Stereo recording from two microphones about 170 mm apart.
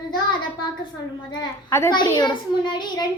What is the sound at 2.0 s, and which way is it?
A child's voice, 25° left (ahead or behind).